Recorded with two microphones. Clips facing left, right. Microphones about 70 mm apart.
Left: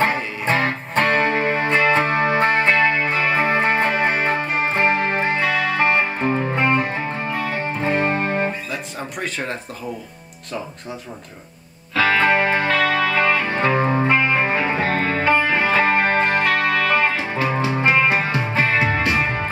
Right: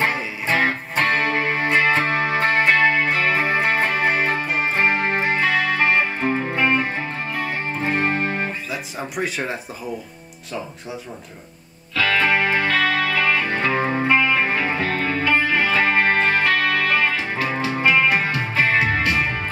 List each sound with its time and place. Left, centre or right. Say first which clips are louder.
0.1 s music: left 1 dB; left
6.2 s music: left 1 dB; left
6.5 s music: even; left
8.0 s music: left 2 dB; left
9.1 s speech: right 2 dB; centre
11.9 s music: left 2 dB; left